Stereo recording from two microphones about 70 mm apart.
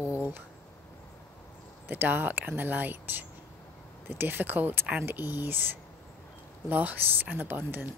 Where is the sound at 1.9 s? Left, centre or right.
Right.